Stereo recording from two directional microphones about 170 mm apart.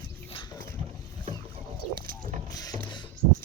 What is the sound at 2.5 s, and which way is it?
Boat, 20° left (ahead or behind).